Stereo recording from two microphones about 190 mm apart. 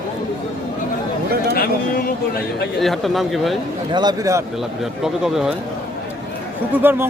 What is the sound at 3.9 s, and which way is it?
Speech, 20° right (ahead or behind).